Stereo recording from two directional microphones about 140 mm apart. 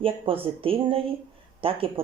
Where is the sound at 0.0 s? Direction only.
40° right (ahead or behind).